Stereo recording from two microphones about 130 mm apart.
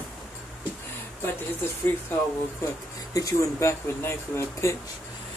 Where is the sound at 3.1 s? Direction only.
25° left (ahead or behind).